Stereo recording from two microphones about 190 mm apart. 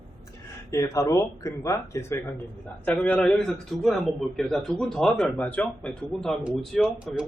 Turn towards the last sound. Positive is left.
turn(degrees=0)  # may be behind; listen again after turning